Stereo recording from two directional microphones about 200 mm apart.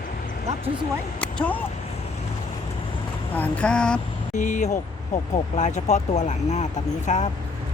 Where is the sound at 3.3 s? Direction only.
5° left (ahead or behind).